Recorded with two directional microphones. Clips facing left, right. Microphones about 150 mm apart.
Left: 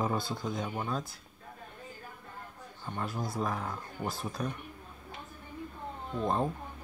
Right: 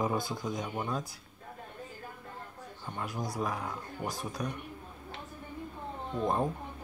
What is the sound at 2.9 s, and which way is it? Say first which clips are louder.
Speech: left 1 dB; 15° right (ahead or behind).